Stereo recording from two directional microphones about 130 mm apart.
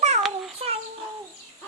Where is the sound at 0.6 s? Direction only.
45° right (ahead or behind).